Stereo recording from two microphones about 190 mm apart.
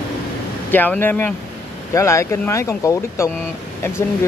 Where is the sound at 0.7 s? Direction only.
10° left (ahead or behind).